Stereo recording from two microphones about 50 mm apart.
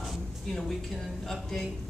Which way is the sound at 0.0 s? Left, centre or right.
Centre.